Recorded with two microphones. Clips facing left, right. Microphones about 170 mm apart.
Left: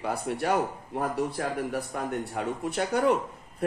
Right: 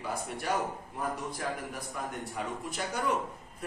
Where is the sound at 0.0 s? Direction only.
65° left (ahead or behind).